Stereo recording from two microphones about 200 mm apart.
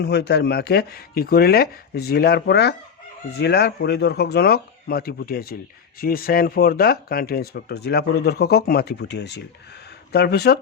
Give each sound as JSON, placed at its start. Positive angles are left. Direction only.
{"t": 0.0, "sound": "speech", "side_deg": 55}